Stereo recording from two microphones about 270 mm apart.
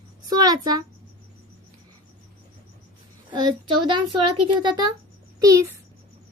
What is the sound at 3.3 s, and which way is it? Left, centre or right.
A woman's voice, centre.